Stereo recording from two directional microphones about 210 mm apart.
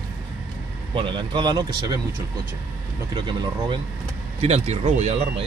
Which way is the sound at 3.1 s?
20° right (ahead or behind).